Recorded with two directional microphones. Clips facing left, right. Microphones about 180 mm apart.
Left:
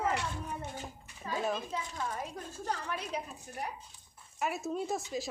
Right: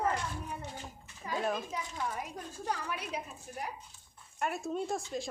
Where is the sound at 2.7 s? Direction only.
10° right (ahead or behind).